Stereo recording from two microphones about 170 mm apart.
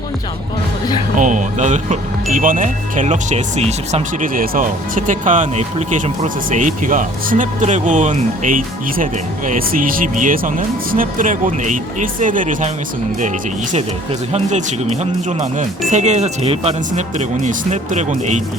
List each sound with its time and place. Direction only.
1.1 s speech: 50° right (ahead or behind)
14.3 s speech: 40° right (ahead or behind)